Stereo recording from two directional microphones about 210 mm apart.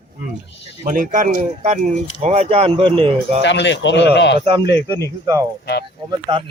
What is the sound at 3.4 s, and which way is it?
Speech, 55° left (ahead or behind).